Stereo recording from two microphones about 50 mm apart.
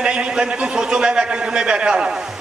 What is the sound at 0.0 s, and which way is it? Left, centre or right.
A man's voice, right.